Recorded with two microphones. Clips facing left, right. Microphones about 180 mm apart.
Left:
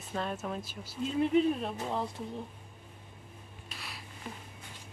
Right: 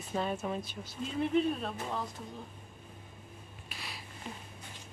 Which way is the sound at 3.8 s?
Centre (ahead or behind).